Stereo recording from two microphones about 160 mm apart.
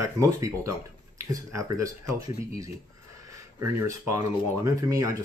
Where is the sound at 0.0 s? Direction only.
20° right (ahead or behind).